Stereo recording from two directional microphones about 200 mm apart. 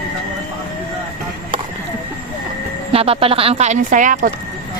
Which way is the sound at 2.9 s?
30° right (ahead or behind).